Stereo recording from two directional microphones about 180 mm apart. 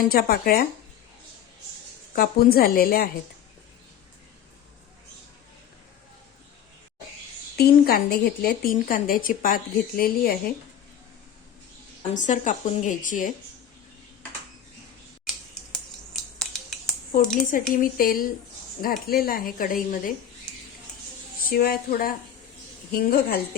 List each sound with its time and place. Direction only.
0.0 s a woman's voice: 55° left (ahead or behind)
2.1 s a woman's voice: 55° left (ahead or behind)
7.5 s a woman's voice: 60° left (ahead or behind)
12.1 s a woman's voice: 45° left (ahead or behind)
16.1 s scissors: centre (ahead or behind)
16.5 s finger snapping: centre (ahead or behind)
17.1 s a woman's voice: 45° left (ahead or behind)
21.5 s a woman's voice: 55° left (ahead or behind)